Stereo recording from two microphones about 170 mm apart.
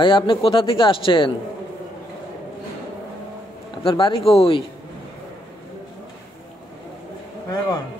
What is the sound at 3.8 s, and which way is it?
Speech, 30° left (ahead or behind).